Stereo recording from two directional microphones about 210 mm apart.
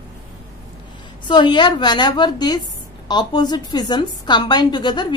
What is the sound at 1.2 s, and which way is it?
A woman's voice, 20° left (ahead or behind).